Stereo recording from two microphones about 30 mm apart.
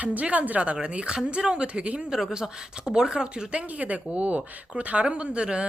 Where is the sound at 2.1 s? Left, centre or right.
Right.